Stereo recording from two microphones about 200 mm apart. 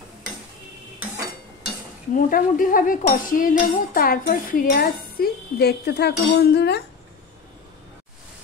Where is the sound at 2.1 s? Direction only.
45° left (ahead or behind).